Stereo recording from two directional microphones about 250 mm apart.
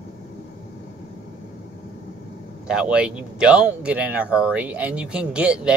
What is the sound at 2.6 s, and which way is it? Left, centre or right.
Speech, centre.